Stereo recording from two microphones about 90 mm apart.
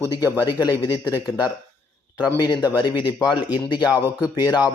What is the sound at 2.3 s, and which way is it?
A man's voice, 50° left (ahead or behind).